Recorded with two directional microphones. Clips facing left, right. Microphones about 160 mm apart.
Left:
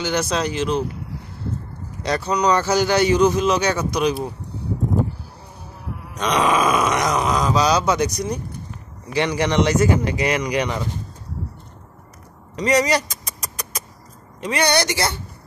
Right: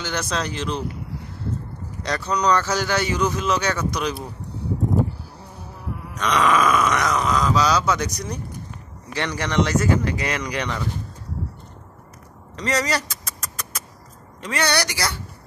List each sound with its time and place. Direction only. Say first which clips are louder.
0.0 s speech: left 5 dB; 15° left (ahead or behind)
2.0 s speech: left 2 dB; 10° left (ahead or behind)
6.1 s speech: left 1 dB; 20° left (ahead or behind)
12.5 s a sound: left 5 dB; 15° left (ahead or behind)
14.4 s a woman's voice: left 3 dB; 20° left (ahead or behind)